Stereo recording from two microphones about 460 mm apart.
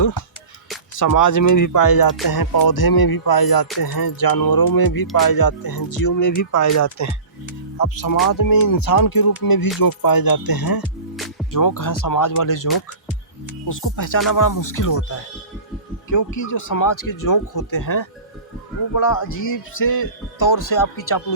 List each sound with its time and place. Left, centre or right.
0.9 s a man's voice: left
13.7 s a man's voice: left
16.0 s a man's voice: left